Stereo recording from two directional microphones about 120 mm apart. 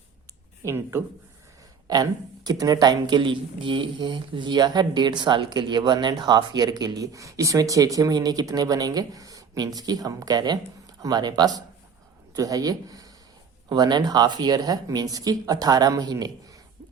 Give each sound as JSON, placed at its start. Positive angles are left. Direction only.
{"t": 0.6, "sound": "speech", "side_deg": -25}
{"t": 1.9, "sound": "speech", "side_deg": -35}